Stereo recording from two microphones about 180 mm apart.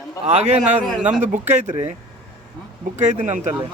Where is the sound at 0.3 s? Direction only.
35° right (ahead or behind).